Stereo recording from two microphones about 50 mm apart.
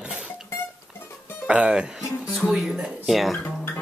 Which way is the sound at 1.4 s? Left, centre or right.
Right.